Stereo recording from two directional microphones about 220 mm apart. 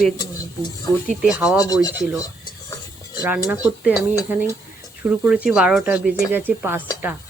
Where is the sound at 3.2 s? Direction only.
5° right (ahead or behind).